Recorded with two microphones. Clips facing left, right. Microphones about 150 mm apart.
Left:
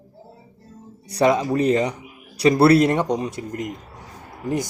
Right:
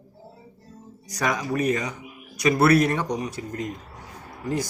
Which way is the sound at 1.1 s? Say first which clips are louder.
Left 8 dB; 30° left (ahead or behind).